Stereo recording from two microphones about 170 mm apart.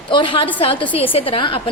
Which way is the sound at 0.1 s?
30° left (ahead or behind).